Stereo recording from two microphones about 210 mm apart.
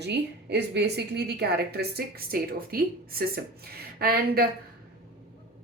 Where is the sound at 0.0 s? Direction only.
55° right (ahead or behind).